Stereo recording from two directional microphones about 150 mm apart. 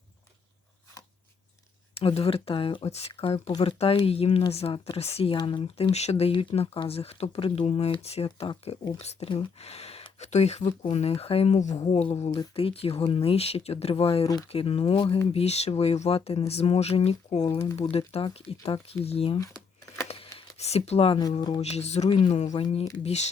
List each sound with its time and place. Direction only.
2.0 s speech: 40° left (ahead or behind)
5.9 s speech: 45° left (ahead or behind)
20.1 s a sound: 40° left (ahead or behind)
20.6 s speech: 45° left (ahead or behind)